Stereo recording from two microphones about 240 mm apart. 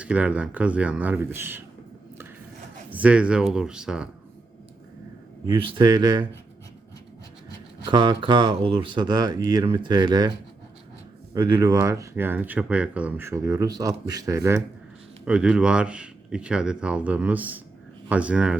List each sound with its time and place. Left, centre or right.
0.0 s speech: centre
2.9 s speech: centre
5.5 s speech: centre
7.9 s speech: centre
11.3 s speech: centre